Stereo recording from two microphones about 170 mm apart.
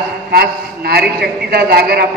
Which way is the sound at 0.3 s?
65° right (ahead or behind).